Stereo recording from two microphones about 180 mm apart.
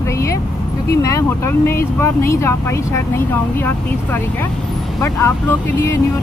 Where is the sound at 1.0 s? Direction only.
15° left (ahead or behind).